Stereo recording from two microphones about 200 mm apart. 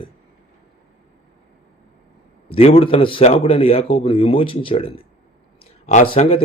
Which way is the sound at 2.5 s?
30° left (ahead or behind).